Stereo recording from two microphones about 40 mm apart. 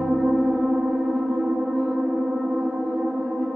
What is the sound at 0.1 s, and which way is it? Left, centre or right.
Gong, right.